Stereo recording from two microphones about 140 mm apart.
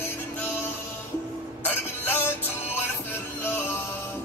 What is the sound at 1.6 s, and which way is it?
Music, 15° left (ahead or behind).